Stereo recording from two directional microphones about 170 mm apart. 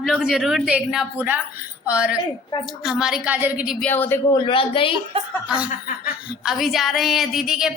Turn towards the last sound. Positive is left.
turn(degrees=-5)  # may be behind; listen again after turning